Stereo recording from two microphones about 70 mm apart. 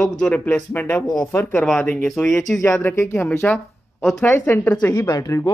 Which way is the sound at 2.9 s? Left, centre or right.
Left.